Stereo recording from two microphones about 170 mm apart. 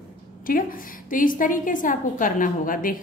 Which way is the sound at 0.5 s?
55° left (ahead or behind).